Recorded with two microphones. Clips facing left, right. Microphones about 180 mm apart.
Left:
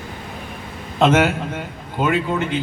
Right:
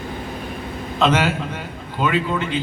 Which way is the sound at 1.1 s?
50° left (ahead or behind).